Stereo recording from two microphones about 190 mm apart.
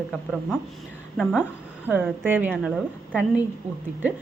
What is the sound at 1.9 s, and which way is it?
A woman's voice, 10° right (ahead or behind).